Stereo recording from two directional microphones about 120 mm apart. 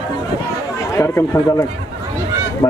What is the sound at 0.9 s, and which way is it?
Speech, 25° left (ahead or behind).